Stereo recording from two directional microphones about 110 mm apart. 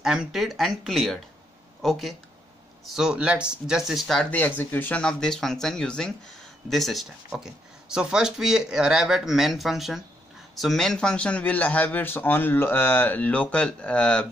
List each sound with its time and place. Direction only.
0.0 s speech: 5° right (ahead or behind)
4.3 s a man's voice: 15° left (ahead or behind)